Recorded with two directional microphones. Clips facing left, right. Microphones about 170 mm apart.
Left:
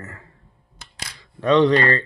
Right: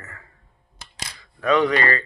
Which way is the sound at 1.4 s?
30° left (ahead or behind).